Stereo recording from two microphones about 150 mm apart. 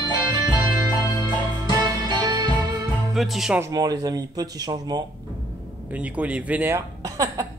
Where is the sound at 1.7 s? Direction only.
30° right (ahead or behind).